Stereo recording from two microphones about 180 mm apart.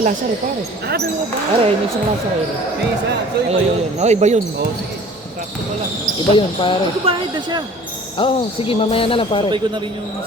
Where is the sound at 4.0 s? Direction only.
40° right (ahead or behind).